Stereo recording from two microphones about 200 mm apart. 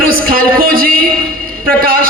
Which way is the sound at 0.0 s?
45° right (ahead or behind).